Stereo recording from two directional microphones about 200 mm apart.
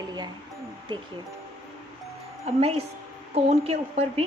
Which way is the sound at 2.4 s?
30° right (ahead or behind).